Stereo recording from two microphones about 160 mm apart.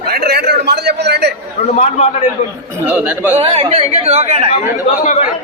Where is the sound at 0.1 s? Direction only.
80° right.